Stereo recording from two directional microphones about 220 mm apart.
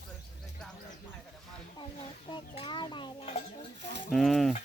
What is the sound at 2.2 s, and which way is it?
Chicken, 20° left (ahead or behind).